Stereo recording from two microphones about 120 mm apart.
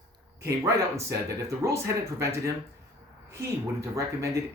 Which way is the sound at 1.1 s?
25° right (ahead or behind).